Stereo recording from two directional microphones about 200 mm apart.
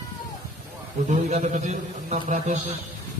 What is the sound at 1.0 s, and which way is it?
A man's voice, 35° right (ahead or behind).